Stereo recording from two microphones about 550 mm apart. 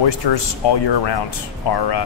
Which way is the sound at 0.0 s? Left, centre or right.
Left.